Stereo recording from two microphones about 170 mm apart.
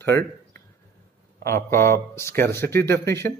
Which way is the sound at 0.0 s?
15° left (ahead or behind).